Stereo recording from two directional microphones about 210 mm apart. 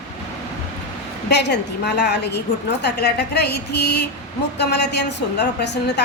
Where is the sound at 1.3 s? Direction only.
55° left (ahead or behind).